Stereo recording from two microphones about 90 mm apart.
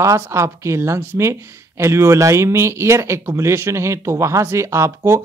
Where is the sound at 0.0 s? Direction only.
35° right (ahead or behind).